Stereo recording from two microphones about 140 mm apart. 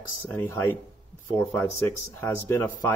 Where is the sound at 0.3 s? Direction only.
15° left (ahead or behind).